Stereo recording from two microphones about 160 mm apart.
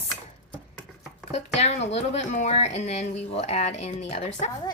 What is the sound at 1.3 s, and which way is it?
Speech, 40° left (ahead or behind).